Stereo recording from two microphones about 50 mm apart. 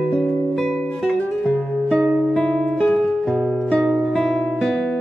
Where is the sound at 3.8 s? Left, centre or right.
Centre.